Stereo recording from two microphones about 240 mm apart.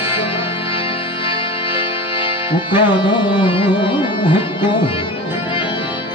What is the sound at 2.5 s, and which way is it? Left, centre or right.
Music, centre.